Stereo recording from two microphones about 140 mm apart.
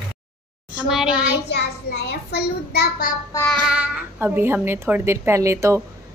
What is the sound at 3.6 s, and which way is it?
Speech, 10° right (ahead or behind).